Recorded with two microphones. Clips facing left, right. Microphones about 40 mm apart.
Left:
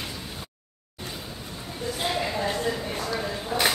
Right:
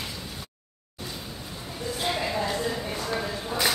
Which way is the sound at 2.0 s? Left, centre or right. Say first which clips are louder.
Even; centre.